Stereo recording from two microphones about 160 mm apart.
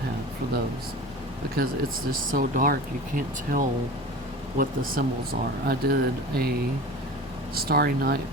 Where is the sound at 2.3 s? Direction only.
60° right (ahead or behind).